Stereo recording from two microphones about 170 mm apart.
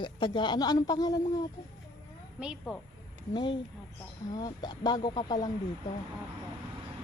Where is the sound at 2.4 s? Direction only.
5° right (ahead or behind).